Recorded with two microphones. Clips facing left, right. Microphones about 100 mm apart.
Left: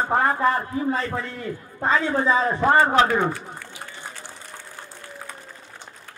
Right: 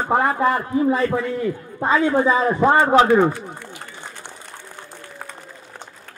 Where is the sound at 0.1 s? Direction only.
15° right (ahead or behind).